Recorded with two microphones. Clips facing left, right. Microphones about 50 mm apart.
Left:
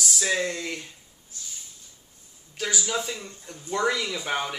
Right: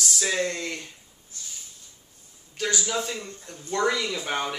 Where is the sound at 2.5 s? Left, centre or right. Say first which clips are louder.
Right 1 dB; centre.